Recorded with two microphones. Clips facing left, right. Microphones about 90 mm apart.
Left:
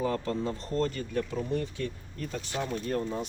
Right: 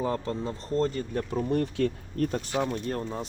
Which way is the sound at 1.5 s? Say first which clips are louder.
Right 6 dB; 60° right (ahead or behind).